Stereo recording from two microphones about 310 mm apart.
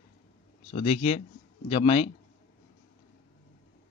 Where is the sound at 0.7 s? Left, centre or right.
Centre.